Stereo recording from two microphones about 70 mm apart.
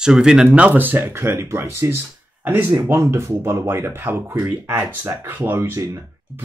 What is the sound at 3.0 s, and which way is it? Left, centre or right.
Speech, right.